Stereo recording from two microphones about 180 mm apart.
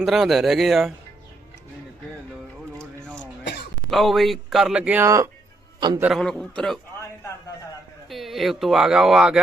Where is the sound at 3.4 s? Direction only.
65° left (ahead or behind).